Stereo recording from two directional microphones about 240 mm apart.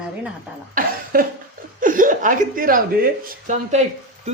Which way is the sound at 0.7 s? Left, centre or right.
Right.